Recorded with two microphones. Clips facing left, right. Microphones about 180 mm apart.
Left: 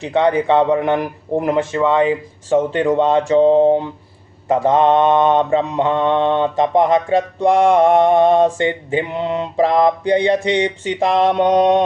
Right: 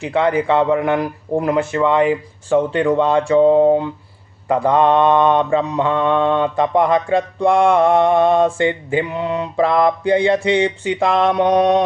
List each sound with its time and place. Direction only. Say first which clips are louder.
0.0 s speech: left 1 dB; 20° left (ahead or behind)